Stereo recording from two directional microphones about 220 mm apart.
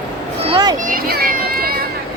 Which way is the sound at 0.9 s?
40° right (ahead or behind).